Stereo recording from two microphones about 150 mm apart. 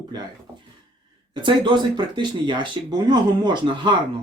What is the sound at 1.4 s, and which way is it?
Speech, 30° right (ahead or behind).